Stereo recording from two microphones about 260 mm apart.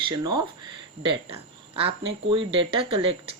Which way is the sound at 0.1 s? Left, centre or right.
Centre.